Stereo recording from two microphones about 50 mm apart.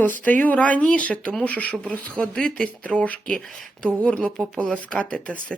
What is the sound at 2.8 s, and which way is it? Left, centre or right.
Speech, left.